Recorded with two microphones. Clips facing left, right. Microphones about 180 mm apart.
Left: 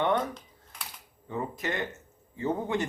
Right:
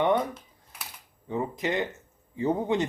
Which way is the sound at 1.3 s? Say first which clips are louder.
Right 4 dB; 20° right (ahead or behind).